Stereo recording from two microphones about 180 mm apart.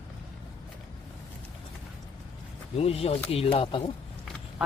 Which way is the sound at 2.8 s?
35° left (ahead or behind).